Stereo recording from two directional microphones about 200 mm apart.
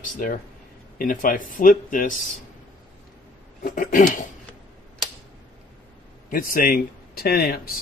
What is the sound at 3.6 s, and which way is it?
Speech, 45° left (ahead or behind).